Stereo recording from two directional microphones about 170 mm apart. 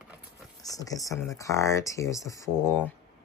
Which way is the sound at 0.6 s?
20° left (ahead or behind).